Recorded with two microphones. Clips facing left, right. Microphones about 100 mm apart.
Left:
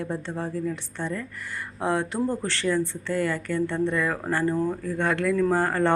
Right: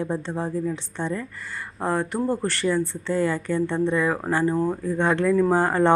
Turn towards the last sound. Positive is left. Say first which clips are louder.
# right 3 dB
turn(degrees=-20)  # may be behind; listen again after turning